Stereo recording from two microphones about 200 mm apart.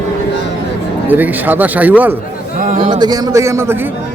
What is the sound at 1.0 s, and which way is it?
A man's voice, 10° right (ahead or behind).